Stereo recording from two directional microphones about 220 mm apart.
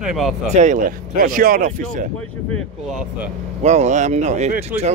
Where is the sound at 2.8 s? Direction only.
5° right (ahead or behind).